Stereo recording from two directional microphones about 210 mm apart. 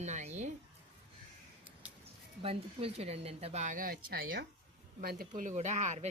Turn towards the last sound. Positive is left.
turn(degrees=-35)  # may be behind; listen again after turning